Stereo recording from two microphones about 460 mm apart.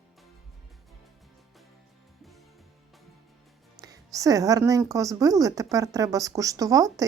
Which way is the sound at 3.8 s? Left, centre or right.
Centre.